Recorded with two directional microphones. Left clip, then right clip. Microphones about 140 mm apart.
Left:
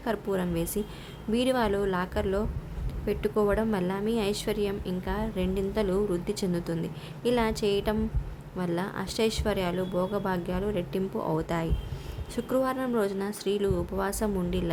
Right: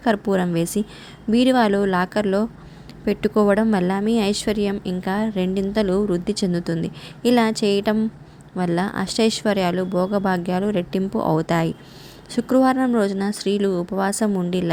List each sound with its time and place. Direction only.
0.0 s a woman's voice: 45° right (ahead or behind)